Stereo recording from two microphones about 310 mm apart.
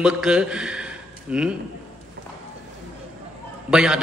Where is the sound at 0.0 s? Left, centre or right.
Centre.